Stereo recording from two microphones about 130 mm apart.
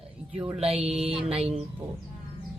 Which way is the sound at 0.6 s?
45° right (ahead or behind).